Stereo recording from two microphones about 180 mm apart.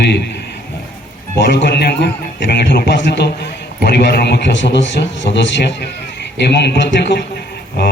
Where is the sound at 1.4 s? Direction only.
70° left (ahead or behind); by 5.8 s 85° left.